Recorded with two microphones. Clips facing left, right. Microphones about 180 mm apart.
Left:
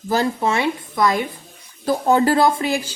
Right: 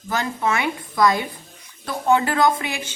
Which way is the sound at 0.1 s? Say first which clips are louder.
Left 4 dB; 30° left (ahead or behind).